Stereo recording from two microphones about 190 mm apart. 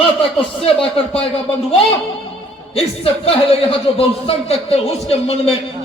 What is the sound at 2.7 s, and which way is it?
A man's voice, 30° left (ahead or behind).